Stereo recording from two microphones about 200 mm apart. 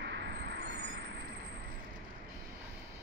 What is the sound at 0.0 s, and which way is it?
Vehicle, 60° right (ahead or behind).